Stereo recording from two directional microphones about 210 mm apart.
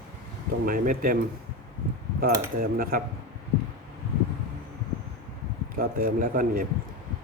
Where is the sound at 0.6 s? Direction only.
40° right (ahead or behind).